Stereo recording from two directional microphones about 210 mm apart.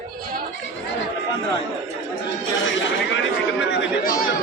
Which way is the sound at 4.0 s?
40° left (ahead or behind).